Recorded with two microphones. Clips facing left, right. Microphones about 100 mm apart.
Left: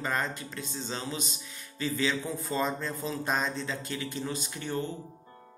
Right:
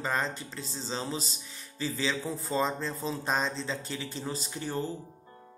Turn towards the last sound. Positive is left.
turn(degrees=-35)  # may be behind; listen again after turning